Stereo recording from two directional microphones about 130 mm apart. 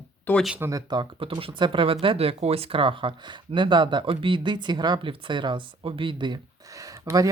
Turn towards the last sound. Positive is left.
turn(degrees=-25)  # may be behind; listen again after turning